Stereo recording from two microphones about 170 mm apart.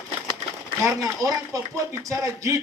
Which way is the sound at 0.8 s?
15° right (ahead or behind).